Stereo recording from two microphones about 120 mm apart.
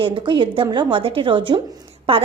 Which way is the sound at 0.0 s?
45° right (ahead or behind).